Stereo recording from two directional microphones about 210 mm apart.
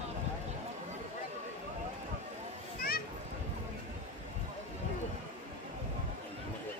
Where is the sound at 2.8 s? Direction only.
45° left (ahead or behind).